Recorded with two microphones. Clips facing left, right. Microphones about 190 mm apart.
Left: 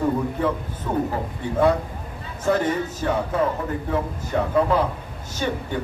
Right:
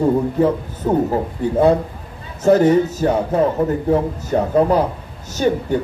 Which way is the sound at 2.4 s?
40° right (ahead or behind).